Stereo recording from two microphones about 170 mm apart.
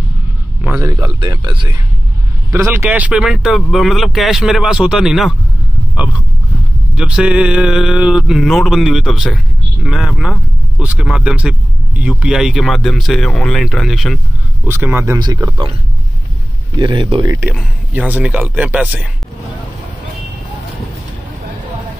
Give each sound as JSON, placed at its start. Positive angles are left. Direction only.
{"t": 0.6, "sound": "a sound", "side_deg": -10}
{"t": 0.8, "sound": "speech", "side_deg": -20}
{"t": 2.5, "sound": "speech", "side_deg": -15}
{"t": 7.0, "sound": "speech", "side_deg": -5}
{"t": 14.7, "sound": "speech", "side_deg": -15}
{"t": 15.1, "sound": "speech", "side_deg": -25}
{"t": 16.7, "sound": "speech", "side_deg": -25}
{"t": 17.2, "sound": "speech", "side_deg": -20}
{"t": 17.5, "sound": "speech", "side_deg": -5}